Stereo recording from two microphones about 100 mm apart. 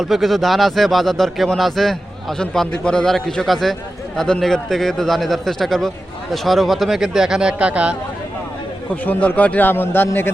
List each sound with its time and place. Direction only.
0.0 s speech: centre (ahead or behind)
9.0 s a man's voice: 15° left (ahead or behind)